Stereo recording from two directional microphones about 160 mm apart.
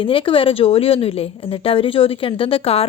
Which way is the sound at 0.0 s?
35° left (ahead or behind).